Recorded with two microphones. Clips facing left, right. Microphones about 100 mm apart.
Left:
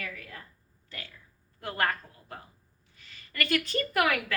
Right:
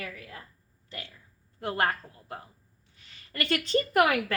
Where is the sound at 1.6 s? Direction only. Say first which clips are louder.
Right 2 dB; 25° right (ahead or behind).